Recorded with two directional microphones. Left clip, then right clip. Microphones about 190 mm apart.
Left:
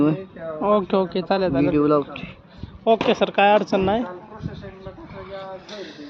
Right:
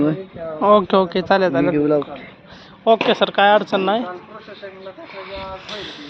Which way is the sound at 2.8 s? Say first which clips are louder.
Right 3 dB; 10° left (ahead or behind).